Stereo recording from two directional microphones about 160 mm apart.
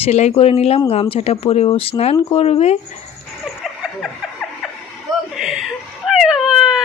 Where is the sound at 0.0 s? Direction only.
40° left (ahead or behind).